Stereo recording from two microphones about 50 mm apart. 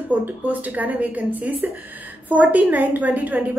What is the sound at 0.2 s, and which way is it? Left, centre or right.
A woman's voice, right.